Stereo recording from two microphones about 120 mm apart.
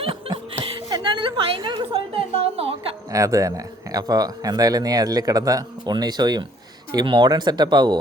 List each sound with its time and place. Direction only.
0.0 s chuckle: 50° right (ahead or behind)
0.9 s a sound: 40° right (ahead or behind)
3.1 s speech: 25° right (ahead or behind)